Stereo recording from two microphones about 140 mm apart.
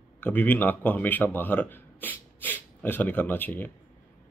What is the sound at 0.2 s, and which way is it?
Speech, 10° left (ahead or behind).